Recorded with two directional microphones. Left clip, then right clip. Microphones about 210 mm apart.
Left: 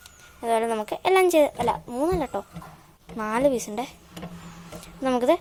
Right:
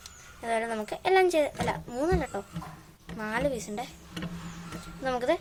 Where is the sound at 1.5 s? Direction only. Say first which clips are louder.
Left 6 dB; 15° left (ahead or behind).